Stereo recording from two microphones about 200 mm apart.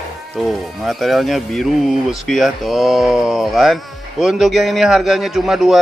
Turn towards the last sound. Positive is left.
turn(degrees=0)  # may be behind; listen again after turning